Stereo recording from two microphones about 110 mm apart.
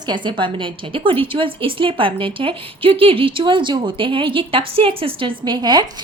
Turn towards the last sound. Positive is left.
turn(degrees=-40)  # may be behind; listen again after turning